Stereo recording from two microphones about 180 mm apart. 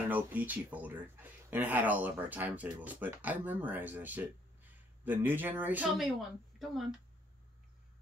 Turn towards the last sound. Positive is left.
turn(degrees=0)  # may be behind; listen again after turning